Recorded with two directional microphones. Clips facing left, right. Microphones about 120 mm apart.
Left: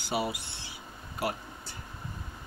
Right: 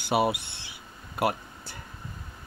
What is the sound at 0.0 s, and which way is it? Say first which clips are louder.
Speech: right 7 dB; 65° right (ahead or behind).